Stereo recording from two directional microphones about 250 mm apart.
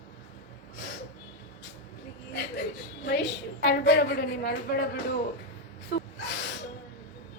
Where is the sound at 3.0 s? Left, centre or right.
Left.